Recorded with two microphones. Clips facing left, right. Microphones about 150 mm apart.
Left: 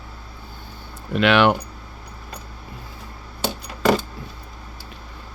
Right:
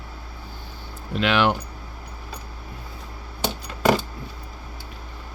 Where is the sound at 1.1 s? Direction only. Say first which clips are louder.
Left 4 dB; 70° left (ahead or behind).